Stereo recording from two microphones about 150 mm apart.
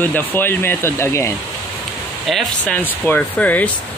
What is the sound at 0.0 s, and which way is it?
Speech, 10° left (ahead or behind).